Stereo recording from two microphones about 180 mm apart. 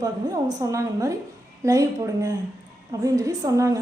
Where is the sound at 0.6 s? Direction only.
20° right (ahead or behind).